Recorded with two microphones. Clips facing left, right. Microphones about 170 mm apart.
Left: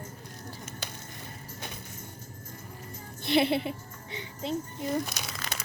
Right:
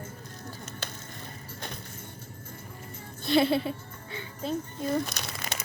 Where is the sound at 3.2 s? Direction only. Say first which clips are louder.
Right 2 dB; 20° left (ahead or behind).